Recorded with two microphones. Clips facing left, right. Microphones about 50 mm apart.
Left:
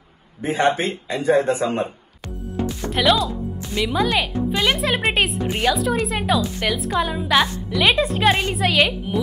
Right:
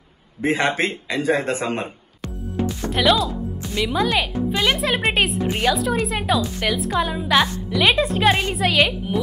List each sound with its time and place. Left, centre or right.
0.4 s a man's voice: right
2.9 s speech: centre